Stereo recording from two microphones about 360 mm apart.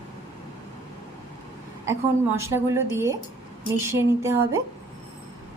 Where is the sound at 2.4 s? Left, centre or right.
Centre.